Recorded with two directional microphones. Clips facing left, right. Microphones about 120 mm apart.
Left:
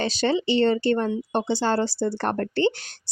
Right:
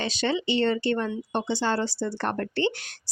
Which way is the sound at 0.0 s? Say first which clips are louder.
Left 4 dB; 35° left (ahead or behind).